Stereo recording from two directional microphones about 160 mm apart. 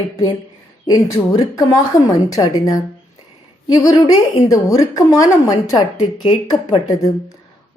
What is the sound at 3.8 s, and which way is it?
A woman's voice, 20° left (ahead or behind).